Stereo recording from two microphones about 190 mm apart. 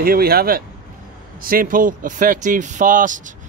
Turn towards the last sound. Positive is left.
turn(degrees=-45)  # may be behind; listen again after turning